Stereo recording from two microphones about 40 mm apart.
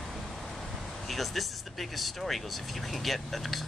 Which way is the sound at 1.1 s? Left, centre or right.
Centre.